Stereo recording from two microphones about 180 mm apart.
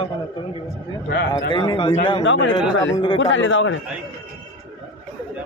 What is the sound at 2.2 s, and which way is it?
A man's voice, 90° left.